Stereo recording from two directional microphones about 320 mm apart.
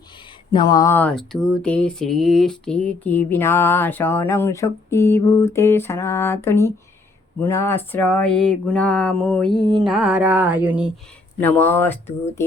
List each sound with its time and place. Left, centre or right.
0.5 s speech: centre
9.6 s a sound: centre
9.8 s speech: centre
11.3 s speech: centre